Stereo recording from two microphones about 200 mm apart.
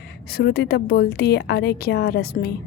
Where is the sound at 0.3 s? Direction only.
50° left (ahead or behind).